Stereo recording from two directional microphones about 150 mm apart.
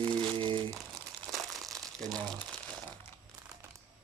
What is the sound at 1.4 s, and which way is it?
Crumpling, centre (ahead or behind).